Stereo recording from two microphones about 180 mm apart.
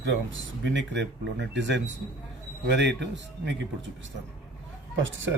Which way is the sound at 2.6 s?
75° right (ahead or behind).